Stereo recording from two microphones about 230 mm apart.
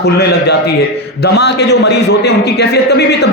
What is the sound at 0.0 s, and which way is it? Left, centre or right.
A man's voice, left.